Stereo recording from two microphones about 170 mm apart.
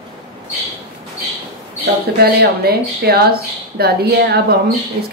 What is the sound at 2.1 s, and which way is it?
Speech, 65° right (ahead or behind).